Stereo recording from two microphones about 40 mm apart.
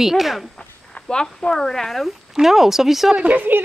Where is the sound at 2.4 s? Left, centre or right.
Centre.